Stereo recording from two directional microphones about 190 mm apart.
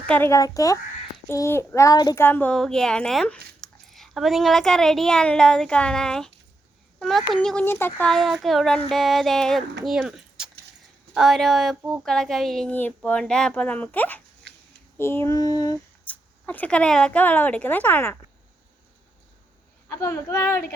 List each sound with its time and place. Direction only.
0.1 s speech: 15° left (ahead or behind)
14.5 s a sound: 70° right (ahead or behind)
14.9 s speech: 15° left (ahead or behind)
16.0 s speech: 10° left (ahead or behind)
20.0 s speech: 15° left (ahead or behind)